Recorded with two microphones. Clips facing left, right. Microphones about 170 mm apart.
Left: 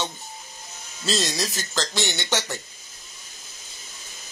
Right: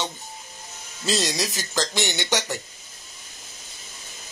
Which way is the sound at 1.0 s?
15° right (ahead or behind).